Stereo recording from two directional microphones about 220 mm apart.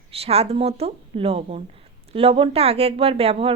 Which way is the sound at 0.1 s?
25° right (ahead or behind).